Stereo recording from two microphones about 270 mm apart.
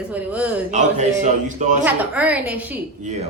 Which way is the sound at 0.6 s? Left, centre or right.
Right.